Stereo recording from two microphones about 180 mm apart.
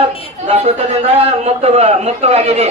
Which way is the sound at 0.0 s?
35° right (ahead or behind).